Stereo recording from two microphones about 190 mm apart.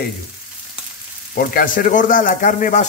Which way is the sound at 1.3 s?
50° left (ahead or behind).